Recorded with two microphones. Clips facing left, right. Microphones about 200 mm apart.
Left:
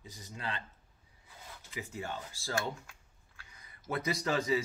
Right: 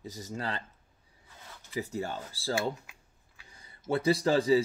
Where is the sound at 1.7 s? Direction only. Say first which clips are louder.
Right 6 dB; 35° right (ahead or behind).